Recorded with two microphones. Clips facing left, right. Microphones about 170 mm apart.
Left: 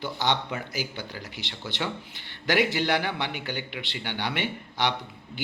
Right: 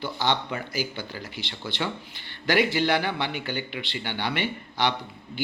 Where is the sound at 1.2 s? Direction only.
Centre (ahead or behind).